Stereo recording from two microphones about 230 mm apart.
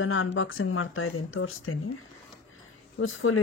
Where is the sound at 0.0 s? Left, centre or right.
Left.